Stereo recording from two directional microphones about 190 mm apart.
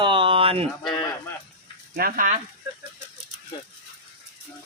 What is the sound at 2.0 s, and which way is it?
Speech, 50° right (ahead or behind).